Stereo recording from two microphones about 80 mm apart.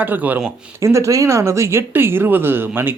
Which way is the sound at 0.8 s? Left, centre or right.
Right.